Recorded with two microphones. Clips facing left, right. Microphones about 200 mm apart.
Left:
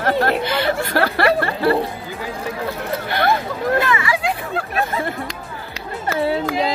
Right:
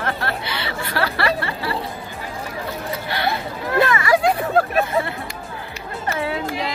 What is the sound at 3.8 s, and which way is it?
Hubbub, 45° right (ahead or behind).